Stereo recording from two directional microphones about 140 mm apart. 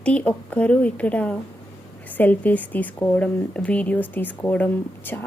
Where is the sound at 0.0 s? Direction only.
10° left (ahead or behind).